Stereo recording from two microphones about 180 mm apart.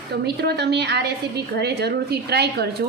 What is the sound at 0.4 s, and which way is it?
A woman's voice, 65° right (ahead or behind).